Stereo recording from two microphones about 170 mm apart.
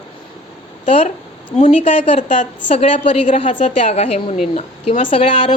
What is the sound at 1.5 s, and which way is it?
A woman's voice, 40° left (ahead or behind).